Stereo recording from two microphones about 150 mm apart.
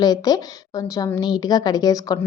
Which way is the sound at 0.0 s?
25° left (ahead or behind).